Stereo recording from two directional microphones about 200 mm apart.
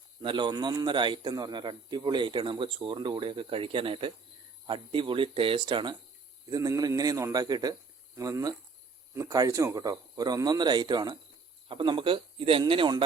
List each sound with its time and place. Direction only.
0.2 s speech: 25° right (ahead or behind)